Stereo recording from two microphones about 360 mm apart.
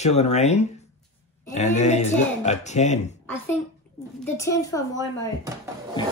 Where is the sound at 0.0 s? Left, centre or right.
Centre.